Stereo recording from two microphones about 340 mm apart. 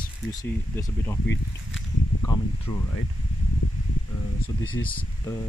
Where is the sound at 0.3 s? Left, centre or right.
Centre.